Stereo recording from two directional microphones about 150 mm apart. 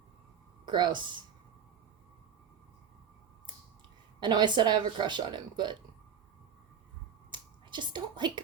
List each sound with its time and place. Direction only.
0.6 s speech: 30° right (ahead or behind)
4.2 s speech: 30° right (ahead or behind)
7.3 s finger snapping: 30° right (ahead or behind)